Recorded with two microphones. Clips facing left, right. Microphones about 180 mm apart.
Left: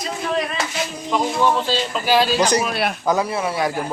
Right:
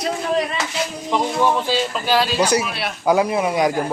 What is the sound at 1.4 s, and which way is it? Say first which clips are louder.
Speech: even; 10° right (ahead or behind).